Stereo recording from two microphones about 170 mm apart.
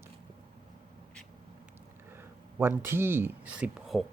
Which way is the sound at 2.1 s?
10° right (ahead or behind).